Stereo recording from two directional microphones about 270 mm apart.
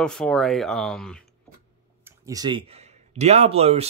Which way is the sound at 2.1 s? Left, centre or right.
Centre.